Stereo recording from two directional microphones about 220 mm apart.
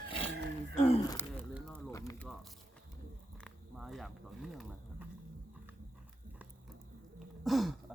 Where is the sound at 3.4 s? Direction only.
Centre (ahead or behind).